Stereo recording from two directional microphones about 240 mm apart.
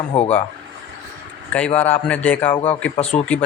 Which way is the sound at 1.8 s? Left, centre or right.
Centre.